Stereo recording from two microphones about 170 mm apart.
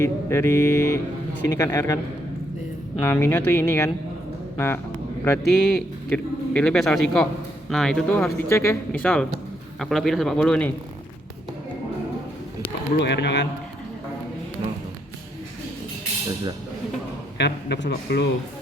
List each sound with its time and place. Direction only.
0.0 s a man's voice: 15° left (ahead or behind)
3.0 s a man's voice: 15° left (ahead or behind)
5.5 s a man's voice: 5° left (ahead or behind)
13.0 s speech: 90° left
17.3 s speech: 85° left